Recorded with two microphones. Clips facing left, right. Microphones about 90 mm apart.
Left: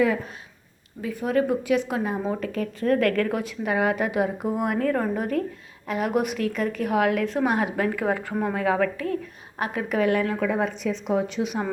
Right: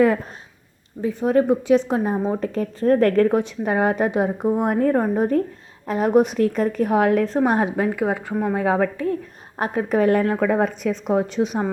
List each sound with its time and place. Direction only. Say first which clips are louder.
1.0 s a woman's voice: right 5 dB; 30° right (ahead or behind)
8.6 s a woman's voice: right 2 dB; 25° right (ahead or behind)